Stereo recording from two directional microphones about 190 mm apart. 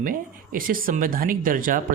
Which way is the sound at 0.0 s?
45° right (ahead or behind).